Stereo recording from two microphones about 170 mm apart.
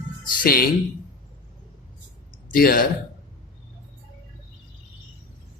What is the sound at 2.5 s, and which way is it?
Speech, 55° left (ahead or behind).